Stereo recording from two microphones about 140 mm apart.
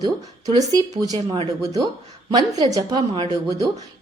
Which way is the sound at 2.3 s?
25° right (ahead or behind).